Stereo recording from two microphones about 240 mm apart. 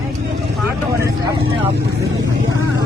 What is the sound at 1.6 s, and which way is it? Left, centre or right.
Vehicle, right.